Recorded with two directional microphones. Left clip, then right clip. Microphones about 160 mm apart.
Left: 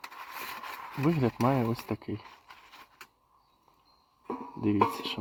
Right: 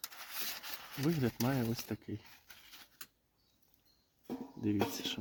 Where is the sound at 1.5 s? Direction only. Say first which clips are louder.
Left 8 dB; 30° left (ahead or behind).